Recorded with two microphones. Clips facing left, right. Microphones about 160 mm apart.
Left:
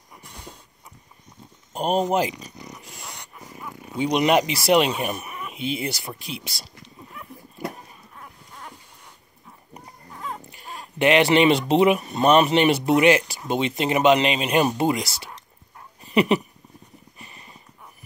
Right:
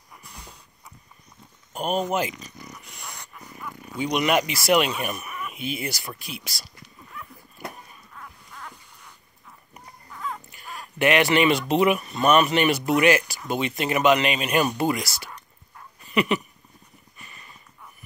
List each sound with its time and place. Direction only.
1.7 s speech: 30° left (ahead or behind)
2.7 s dog: 25° left (ahead or behind)
8.2 s dog: 25° left (ahead or behind)
9.8 s dog: 30° left (ahead or behind)
12.1 s speech: 30° left (ahead or behind)
16.0 s a sound: 30° left (ahead or behind)